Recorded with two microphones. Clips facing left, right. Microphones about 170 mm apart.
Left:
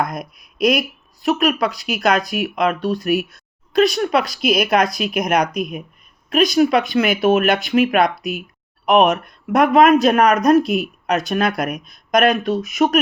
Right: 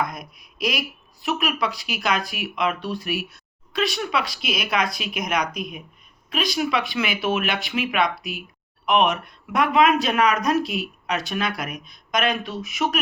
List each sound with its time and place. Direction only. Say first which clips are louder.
0.0 s speech: left 5 dB; 45° left (ahead or behind)
0.3 s speech: left 10 dB; 5° right (ahead or behind)
1.2 s speech: left 7 dB; 40° left (ahead or behind)